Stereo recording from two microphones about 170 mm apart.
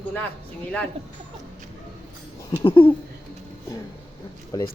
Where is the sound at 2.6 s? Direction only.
30° left (ahead or behind).